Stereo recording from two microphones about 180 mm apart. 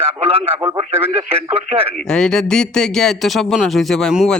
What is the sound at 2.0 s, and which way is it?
Speech, 5° left (ahead or behind).